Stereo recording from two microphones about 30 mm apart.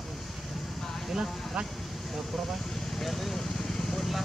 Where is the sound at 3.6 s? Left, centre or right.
Centre.